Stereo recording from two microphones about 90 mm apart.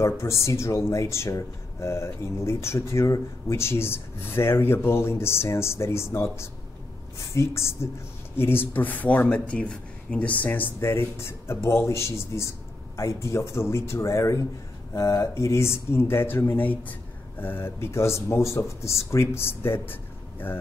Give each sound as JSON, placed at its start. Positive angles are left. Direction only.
{"t": 0.0, "sound": "speech", "side_deg": 35}